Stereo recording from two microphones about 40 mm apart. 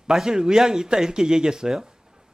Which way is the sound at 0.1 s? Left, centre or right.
Centre.